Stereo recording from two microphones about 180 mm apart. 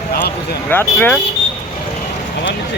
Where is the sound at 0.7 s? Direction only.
10° left (ahead or behind).